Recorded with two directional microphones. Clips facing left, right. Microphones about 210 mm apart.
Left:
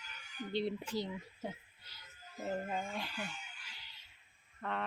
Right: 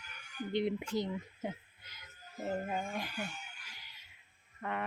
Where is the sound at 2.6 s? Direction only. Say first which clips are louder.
Right 2 dB; 15° right (ahead or behind).